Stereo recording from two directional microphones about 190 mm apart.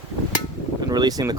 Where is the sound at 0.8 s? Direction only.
20° right (ahead or behind).